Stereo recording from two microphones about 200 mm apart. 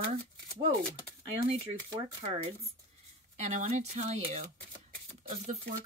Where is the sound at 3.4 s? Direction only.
35° right (ahead or behind).